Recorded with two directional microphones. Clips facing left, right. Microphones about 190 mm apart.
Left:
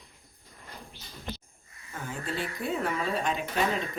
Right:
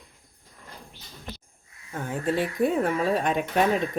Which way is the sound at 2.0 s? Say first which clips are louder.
Right 8 dB; 55° right (ahead or behind).